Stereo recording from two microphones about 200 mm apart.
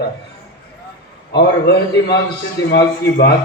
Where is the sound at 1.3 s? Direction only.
55° left (ahead or behind).